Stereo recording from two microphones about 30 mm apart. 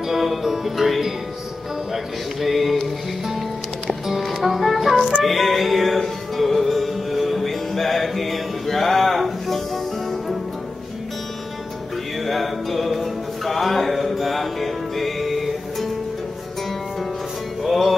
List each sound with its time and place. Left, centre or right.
0.1 s music: centre
2.4 s music: centre
4.1 s music: centre
12.3 s music: centre